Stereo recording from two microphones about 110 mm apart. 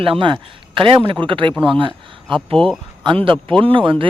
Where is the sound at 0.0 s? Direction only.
50° right (ahead or behind).